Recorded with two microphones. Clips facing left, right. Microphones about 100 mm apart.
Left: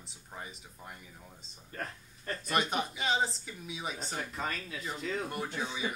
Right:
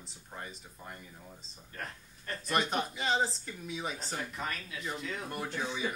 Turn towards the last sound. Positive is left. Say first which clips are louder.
# right 1 dB
turn(degrees=0)  # may be behind; listen again after turning